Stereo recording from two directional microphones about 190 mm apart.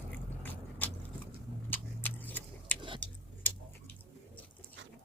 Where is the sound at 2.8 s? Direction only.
25° right (ahead or behind).